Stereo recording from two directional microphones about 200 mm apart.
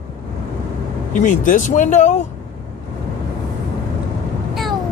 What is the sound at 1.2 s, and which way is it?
Speech, 40° left (ahead or behind).